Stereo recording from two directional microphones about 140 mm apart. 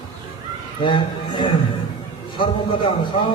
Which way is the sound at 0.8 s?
35° left (ahead or behind).